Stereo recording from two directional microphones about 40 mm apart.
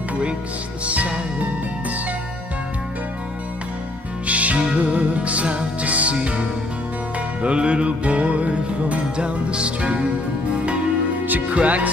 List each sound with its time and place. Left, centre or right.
0.8 s music: right
4.3 s music: right
7.4 s music: right
11.5 s music: right